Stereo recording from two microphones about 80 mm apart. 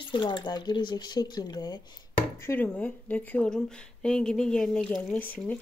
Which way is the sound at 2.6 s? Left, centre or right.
Left.